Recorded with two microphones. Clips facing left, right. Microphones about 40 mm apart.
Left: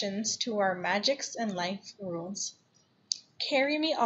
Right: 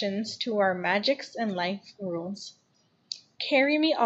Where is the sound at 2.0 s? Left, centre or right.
Centre.